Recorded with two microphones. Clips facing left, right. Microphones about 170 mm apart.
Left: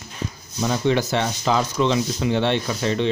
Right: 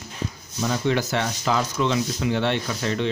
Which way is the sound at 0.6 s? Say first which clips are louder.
Left 3 dB; 25° left (ahead or behind).